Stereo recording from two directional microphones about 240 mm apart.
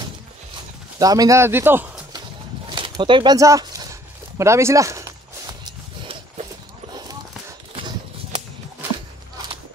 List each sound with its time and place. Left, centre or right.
0.9 s speech: centre
2.7 s speech: centre
4.4 s walk: centre
7.7 s a sound: centre